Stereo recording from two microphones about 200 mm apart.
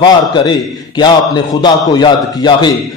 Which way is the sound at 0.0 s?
20° left (ahead or behind).